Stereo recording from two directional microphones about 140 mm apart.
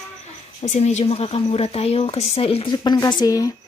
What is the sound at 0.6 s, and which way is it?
Speech, 55° left (ahead or behind).